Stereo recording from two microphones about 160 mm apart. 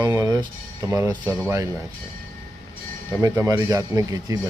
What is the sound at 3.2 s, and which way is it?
Speech, 20° right (ahead or behind).